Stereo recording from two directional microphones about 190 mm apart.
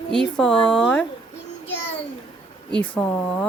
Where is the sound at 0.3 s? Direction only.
5° left (ahead or behind).